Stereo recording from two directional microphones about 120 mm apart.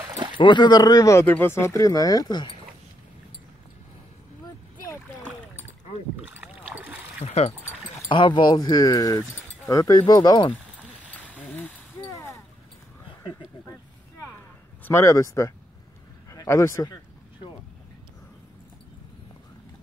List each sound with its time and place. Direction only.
0.4 s speech: 40° left (ahead or behind)
1.2 s speech: 15° left (ahead or behind); by 2.5 s 35° left (ahead or behind)
4.8 s splash: 20° left (ahead or behind)
6.3 s rowboat: 15° right (ahead or behind)
7.2 s speech: 65° left (ahead or behind)
8.1 s speech: 40° left (ahead or behind)
12.1 s a sound: 25° left (ahead or behind)
14.8 s speech: 20° left (ahead or behind)